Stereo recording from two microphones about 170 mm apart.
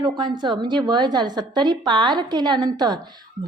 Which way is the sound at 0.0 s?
25° right (ahead or behind).